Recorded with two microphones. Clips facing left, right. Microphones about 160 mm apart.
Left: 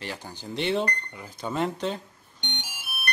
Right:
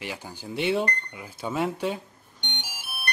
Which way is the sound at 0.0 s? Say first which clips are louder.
Even; 10° right (ahead or behind).